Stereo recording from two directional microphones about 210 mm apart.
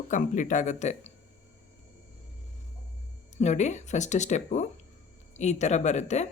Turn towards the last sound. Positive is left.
turn(degrees=35)  # may be behind; listen again after turning